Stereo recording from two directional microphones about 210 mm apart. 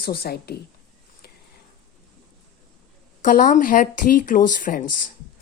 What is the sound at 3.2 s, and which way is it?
Speech, 40° left (ahead or behind).